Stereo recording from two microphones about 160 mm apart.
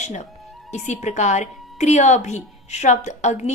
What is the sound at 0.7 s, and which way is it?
A woman's voice, 45° left (ahead or behind).